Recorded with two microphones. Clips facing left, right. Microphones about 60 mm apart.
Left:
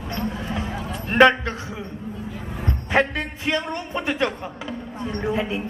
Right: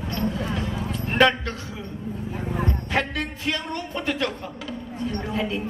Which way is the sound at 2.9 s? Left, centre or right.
Left.